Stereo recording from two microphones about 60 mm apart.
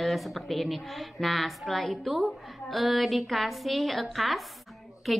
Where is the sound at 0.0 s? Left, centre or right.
Centre.